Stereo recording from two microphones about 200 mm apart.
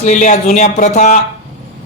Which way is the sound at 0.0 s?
40° left (ahead or behind).